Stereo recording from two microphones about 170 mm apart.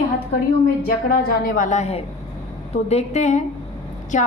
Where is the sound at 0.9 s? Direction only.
60° left (ahead or behind).